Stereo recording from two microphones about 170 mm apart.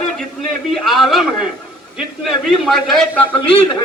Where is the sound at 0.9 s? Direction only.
Centre (ahead or behind).